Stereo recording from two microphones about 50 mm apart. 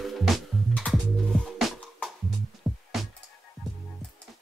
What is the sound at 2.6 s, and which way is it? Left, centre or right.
Music, centre.